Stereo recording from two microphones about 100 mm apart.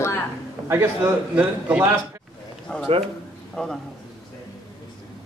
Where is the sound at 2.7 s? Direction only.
10° left (ahead or behind).